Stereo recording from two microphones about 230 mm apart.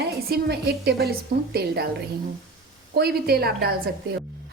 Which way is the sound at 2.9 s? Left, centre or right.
Right.